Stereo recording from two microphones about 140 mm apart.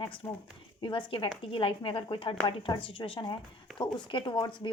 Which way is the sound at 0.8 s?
35° left (ahead or behind).